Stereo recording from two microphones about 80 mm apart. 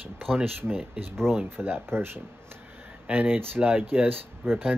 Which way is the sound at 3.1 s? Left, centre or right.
Right.